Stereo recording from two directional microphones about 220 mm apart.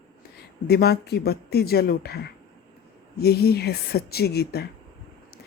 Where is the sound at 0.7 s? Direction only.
45° left (ahead or behind).